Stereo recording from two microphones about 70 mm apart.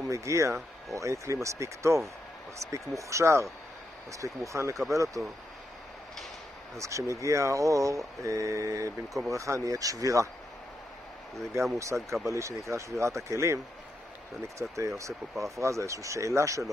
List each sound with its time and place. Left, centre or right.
0.1 s speech: right
6.8 s speech: right
11.8 s speech: right
14.6 s speech: right
15.3 s speech: centre
15.6 s speech: right